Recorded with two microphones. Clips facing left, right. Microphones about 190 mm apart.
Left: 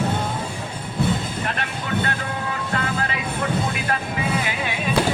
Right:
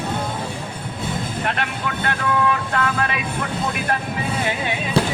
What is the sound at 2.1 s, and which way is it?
Vehicle, 60° right (ahead or behind).